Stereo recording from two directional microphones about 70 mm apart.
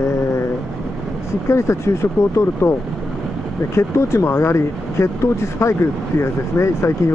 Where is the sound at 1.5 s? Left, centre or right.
Left.